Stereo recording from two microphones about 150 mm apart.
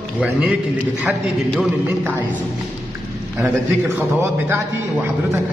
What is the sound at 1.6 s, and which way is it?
Speech, 10° right (ahead or behind).